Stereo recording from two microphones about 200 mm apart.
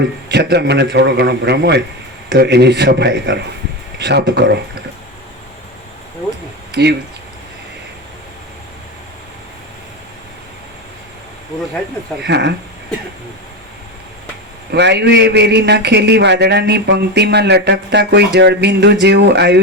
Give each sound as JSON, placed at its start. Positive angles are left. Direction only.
{"t": 0.3, "sound": "a man's voice", "side_deg": -55}
{"t": 12.2, "sound": "a man's voice", "side_deg": -60}
{"t": 14.7, "sound": "a man's voice", "side_deg": -55}